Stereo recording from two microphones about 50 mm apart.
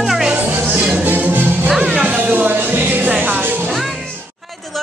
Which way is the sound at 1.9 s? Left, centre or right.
Right.